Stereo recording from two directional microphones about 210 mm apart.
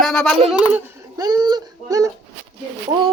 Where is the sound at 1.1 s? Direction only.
20° right (ahead or behind).